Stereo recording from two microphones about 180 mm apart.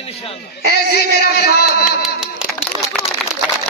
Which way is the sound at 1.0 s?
65° left (ahead or behind).